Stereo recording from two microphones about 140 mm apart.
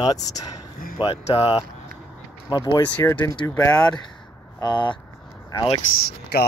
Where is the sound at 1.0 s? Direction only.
40° left (ahead or behind).